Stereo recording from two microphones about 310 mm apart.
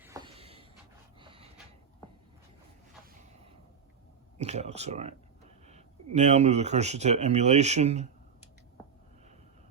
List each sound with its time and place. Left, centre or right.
0.0 s a sound: centre
1.2 s dog: centre
4.4 s speech: right